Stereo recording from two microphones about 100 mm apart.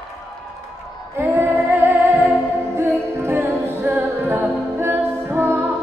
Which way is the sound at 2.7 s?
25° right (ahead or behind).